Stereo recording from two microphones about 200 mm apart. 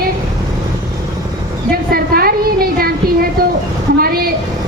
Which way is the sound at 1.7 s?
50° right (ahead or behind).